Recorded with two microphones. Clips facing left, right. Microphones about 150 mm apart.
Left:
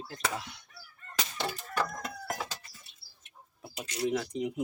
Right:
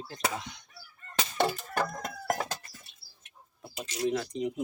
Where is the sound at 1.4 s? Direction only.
50° right (ahead or behind).